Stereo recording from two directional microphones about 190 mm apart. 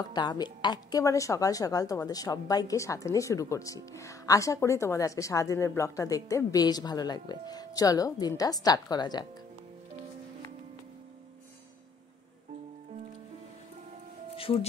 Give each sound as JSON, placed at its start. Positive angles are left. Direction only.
{"t": 0.1, "sound": "a woman's voice", "side_deg": 25}
{"t": 14.3, "sound": "music", "side_deg": 30}